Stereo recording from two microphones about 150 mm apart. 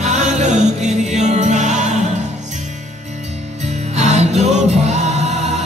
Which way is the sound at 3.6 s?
50° right (ahead or behind).